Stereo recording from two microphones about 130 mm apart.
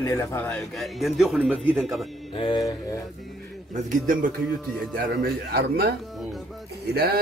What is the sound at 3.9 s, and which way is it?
Speech, 90° right.